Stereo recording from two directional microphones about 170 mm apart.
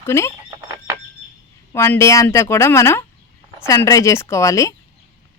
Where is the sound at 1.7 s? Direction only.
15° left (ahead or behind).